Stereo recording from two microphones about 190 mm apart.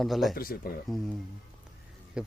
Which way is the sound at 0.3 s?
50° left (ahead or behind).